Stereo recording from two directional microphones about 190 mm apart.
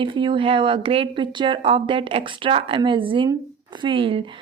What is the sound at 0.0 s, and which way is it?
A woman's voice, 25° right (ahead or behind).